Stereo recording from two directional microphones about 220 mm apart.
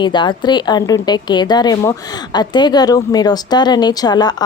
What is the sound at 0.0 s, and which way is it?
A woman's voice, 20° left (ahead or behind).